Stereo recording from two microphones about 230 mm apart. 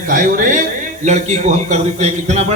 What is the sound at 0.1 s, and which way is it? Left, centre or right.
A man's voice, right.